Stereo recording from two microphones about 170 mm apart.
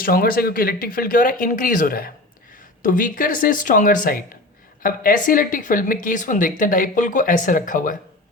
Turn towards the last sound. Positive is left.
turn(degrees=50)  # may be behind; listen again after turning